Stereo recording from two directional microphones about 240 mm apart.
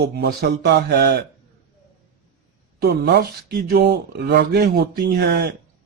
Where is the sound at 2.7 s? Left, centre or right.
Right.